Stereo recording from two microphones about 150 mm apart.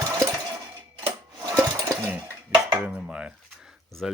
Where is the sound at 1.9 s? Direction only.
15° right (ahead or behind).